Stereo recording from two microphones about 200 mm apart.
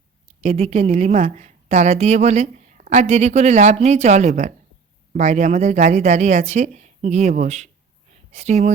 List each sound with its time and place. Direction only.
0.4 s a woman's voice: 30° right (ahead or behind)